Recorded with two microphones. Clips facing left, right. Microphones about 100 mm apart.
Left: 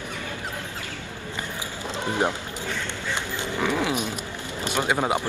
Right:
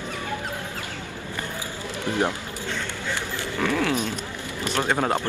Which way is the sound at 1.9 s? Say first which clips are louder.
Even; 20° left (ahead or behind).